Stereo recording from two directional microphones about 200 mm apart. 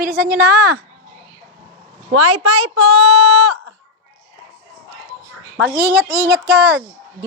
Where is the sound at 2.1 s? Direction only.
90° right.